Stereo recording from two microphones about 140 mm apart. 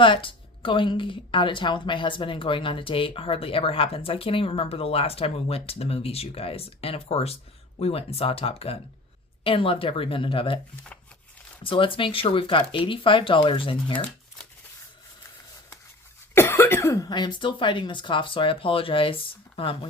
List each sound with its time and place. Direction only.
0.0 s a woman's voice: 40° left (ahead or behind)
11.6 s a woman's voice: 40° left (ahead or behind)
16.3 s a woman's voice: 15° left (ahead or behind); by 19.9 s 40° left (ahead or behind)